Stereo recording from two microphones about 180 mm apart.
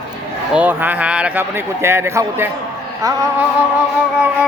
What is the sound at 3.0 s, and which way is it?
Music, 20° right (ahead or behind).